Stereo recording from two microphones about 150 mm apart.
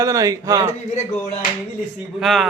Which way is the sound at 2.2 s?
Centre (ahead or behind).